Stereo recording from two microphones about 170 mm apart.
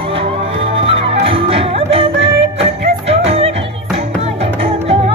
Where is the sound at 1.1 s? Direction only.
35° right (ahead or behind).